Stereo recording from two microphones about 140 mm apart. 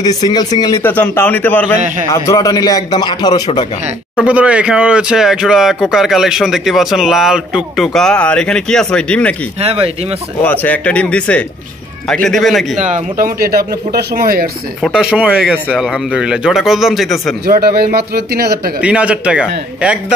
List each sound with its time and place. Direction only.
0.0 s speech: 25° left (ahead or behind)
2.0 s speech: 20° left (ahead or behind)
4.2 s speech: 10° right (ahead or behind); by 9.3 s 5° left (ahead or behind)
9.6 s speech: 45° right (ahead or behind)
10.4 s speech: 10° left (ahead or behind)
12.7 s speech: 60° right (ahead or behind); by 14.5 s 90° right
14.8 s speech: 5° right (ahead or behind)
17.5 s speech: 90° right
18.8 s a man's voice: 10° right (ahead or behind)